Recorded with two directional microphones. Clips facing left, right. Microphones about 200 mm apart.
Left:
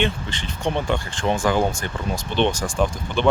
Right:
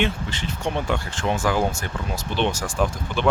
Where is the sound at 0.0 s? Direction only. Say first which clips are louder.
Even; 5° right (ahead or behind).